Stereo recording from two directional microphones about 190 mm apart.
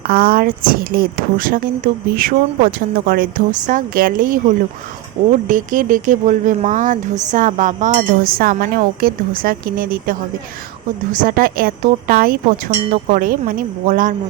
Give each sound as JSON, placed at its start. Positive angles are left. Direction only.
{"t": 0.0, "sound": "speech", "side_deg": -50}